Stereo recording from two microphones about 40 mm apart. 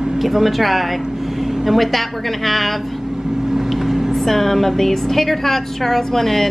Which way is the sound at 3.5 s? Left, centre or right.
Centre.